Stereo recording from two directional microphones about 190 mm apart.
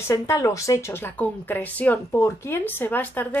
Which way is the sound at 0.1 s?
15° left (ahead or behind).